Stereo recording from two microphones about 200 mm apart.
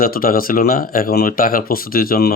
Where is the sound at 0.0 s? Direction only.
45° left (ahead or behind).